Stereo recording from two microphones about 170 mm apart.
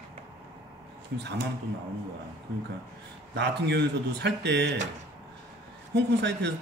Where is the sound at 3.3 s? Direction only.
85° right.